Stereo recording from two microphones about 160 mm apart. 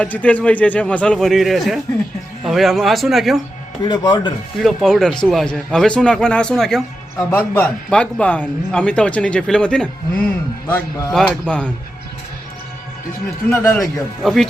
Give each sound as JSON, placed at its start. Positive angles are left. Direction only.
{"t": 0.0, "sound": "a man's voice", "side_deg": 10}
{"t": 3.8, "sound": "speech", "side_deg": 25}
{"t": 4.5, "sound": "a man's voice", "side_deg": 0}
{"t": 13.5, "sound": "speech", "side_deg": 15}
{"t": 13.7, "sound": "a man's voice", "side_deg": 0}